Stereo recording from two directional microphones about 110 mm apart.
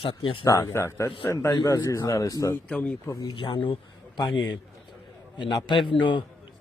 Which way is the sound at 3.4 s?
50° left (ahead or behind).